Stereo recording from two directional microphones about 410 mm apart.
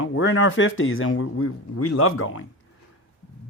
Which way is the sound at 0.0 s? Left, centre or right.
Left.